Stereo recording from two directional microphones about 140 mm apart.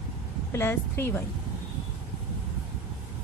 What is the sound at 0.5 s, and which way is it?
Speech, 15° left (ahead or behind).